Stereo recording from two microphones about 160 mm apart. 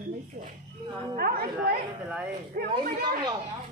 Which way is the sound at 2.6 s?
70° right (ahead or behind).